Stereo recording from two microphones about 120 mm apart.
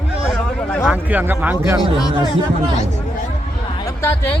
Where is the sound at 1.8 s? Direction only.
35° left (ahead or behind).